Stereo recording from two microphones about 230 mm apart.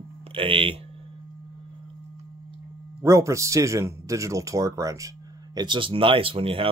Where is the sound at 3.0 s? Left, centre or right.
Centre.